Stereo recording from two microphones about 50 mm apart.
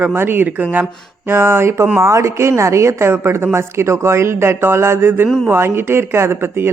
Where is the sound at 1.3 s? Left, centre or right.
Right.